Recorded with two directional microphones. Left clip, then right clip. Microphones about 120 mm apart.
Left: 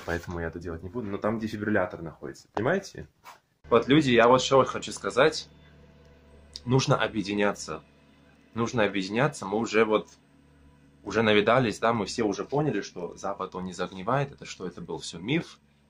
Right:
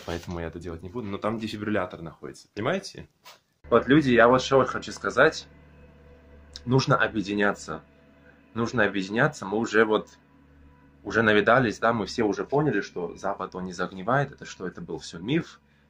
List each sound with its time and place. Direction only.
0.1 s speech: 40° right (ahead or behind)
0.5 s speech: 30° right (ahead or behind)
2.7 s speech: 20° right (ahead or behind)
3.6 s speech: 25° left (ahead or behind)
6.5 s speech: 15° left (ahead or behind)
8.5 s speech: 15° left (ahead or behind)
11.1 s speech: 15° left (ahead or behind)